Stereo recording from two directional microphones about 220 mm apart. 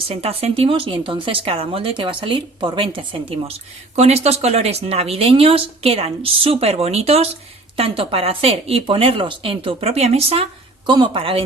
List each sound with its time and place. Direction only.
0.1 s speech: 25° right (ahead or behind)